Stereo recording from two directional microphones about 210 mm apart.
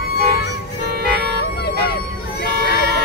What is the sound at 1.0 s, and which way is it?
Vehicle, 50° right (ahead or behind).